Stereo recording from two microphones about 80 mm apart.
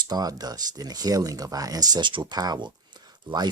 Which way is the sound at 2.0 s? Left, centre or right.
Right.